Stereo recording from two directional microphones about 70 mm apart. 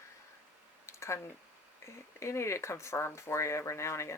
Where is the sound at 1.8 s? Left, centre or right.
Left.